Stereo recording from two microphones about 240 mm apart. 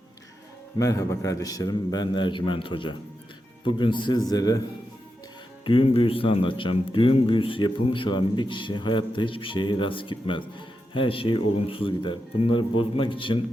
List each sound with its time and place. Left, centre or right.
0.8 s a man's voice: centre
5.6 s speech: left